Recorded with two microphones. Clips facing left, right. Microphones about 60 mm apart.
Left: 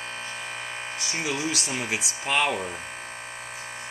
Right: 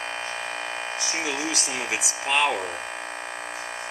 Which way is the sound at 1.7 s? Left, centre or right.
Centre.